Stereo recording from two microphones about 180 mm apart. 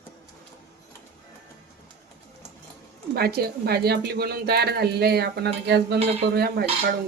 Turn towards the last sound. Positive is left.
turn(degrees=-60)  # may be behind; listen again after turning